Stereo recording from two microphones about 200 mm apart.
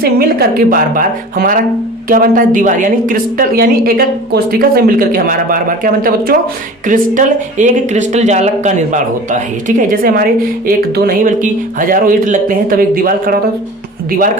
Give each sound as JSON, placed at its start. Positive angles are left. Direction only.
{"t": 0.0, "sound": "a woman's voice", "side_deg": -50}